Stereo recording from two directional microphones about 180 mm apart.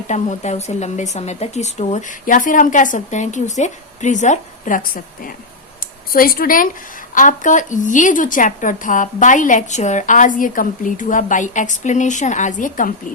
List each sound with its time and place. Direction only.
0.1 s a woman's voice: 40° left (ahead or behind)